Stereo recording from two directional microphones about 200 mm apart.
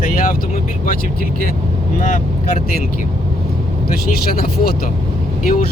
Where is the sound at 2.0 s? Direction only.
40° left (ahead or behind).